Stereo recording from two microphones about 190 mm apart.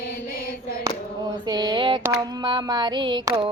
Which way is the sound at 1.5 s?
20° right (ahead or behind).